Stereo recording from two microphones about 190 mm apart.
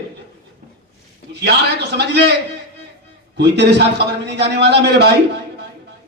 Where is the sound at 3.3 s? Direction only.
60° right (ahead or behind).